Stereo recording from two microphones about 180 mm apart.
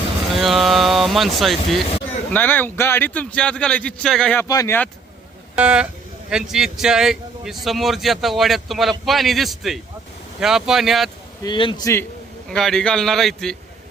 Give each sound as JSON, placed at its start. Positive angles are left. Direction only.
{"t": 0.3, "sound": "speech", "side_deg": 0}
{"t": 2.3, "sound": "a man's voice", "side_deg": 10}
{"t": 4.4, "sound": "a man's voice", "side_deg": 20}
{"t": 5.5, "sound": "speech", "side_deg": -5}
{"t": 11.4, "sound": "a man's voice", "side_deg": 25}
{"t": 12.5, "sound": "speech", "side_deg": 5}